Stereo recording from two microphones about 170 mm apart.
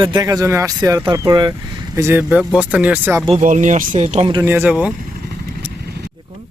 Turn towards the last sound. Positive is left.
turn(degrees=-10)  # may be behind; listen again after turning